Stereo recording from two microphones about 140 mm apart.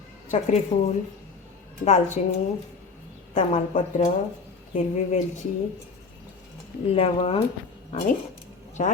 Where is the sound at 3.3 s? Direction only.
55° left (ahead or behind).